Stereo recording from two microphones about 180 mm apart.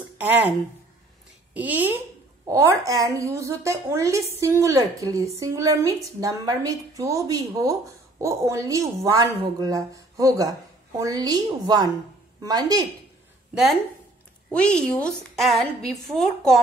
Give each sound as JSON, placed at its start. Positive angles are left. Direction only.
{"t": 0.2, "sound": "speech", "side_deg": -10}
{"t": 1.5, "sound": "a woman's voice", "side_deg": -10}
{"t": 14.5, "sound": "a woman's voice", "side_deg": 5}